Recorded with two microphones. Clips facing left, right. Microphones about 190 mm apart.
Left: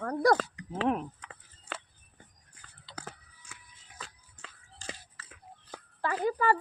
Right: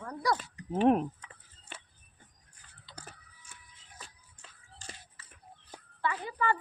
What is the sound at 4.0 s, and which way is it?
Music, 90° left.